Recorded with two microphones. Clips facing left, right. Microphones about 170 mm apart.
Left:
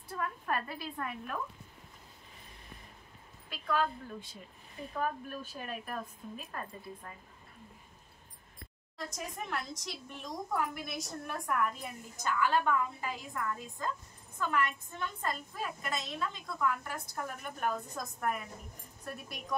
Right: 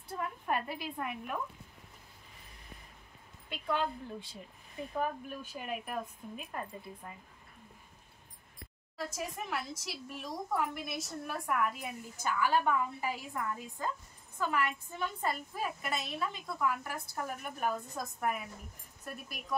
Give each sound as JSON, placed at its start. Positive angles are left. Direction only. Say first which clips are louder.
{"t": 0.2, "sound": "a woman's voice", "louder": "even", "side_deg": -20}
{"t": 3.4, "sound": "a woman's voice", "louder": "left 1 dB", "side_deg": -20}
{"t": 8.9, "sound": "a woman's voice", "louder": "right 2 dB", "side_deg": -5}